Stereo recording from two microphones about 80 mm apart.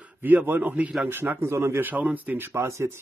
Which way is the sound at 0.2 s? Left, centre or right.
Right.